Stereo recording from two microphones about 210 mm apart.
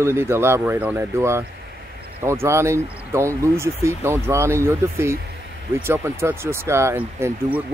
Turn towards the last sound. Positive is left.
turn(degrees=-10)  # may be behind; listen again after turning